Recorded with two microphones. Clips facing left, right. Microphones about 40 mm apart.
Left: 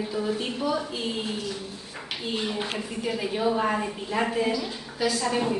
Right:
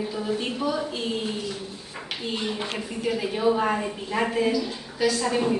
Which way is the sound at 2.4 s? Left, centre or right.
Centre.